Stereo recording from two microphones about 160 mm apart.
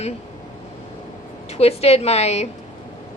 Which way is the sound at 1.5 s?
40° left (ahead or behind).